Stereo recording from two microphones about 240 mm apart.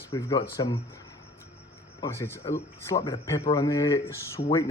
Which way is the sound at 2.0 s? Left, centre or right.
Centre.